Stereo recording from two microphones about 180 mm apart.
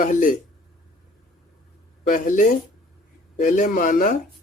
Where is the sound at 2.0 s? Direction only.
50° left (ahead or behind).